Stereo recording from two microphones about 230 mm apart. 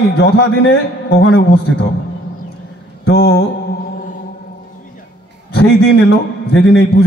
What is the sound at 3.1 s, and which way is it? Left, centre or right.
Speech, left.